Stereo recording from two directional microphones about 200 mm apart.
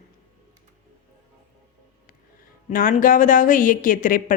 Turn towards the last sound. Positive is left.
turn(degrees=40)  # may be behind; listen again after turning